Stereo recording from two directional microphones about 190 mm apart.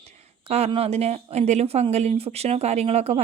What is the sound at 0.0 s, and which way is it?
Speech, 35° right (ahead or behind).